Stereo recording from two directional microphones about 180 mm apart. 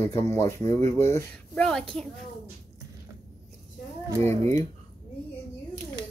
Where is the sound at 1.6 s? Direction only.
5° left (ahead or behind).